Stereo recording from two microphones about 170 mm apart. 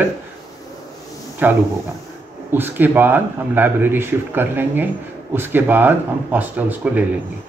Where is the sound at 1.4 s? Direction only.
10° right (ahead or behind).